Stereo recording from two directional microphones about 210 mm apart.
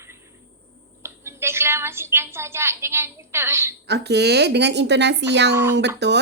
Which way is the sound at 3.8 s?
50° right (ahead or behind).